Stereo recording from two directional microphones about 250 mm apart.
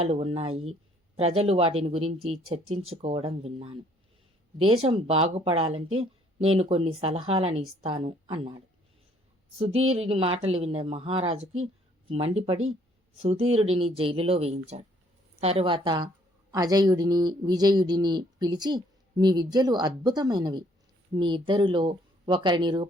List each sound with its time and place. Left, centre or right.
0.0 s speech: right
4.8 s speech: right
9.6 s a man's voice: right